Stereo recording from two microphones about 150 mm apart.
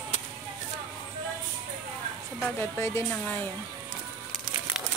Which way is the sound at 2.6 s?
15° left (ahead or behind).